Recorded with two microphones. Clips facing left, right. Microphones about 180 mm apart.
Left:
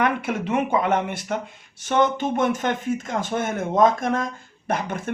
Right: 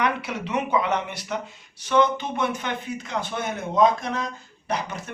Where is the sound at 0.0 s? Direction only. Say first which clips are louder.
Left 3 dB; 50° left (ahead or behind).